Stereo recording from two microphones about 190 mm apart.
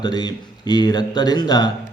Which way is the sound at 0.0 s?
20° left (ahead or behind).